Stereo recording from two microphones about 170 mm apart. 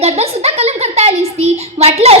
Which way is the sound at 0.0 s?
40° right (ahead or behind).